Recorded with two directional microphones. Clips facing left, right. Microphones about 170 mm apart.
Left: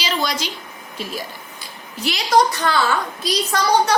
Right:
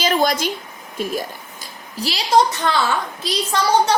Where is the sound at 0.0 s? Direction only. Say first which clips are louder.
Right 5 dB; 50° right (ahead or behind).